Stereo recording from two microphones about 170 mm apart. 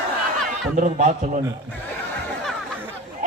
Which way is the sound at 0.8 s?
45° right (ahead or behind).